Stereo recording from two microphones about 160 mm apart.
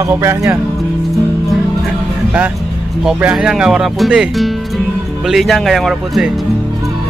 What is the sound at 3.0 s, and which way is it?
Speech, 5° right (ahead or behind).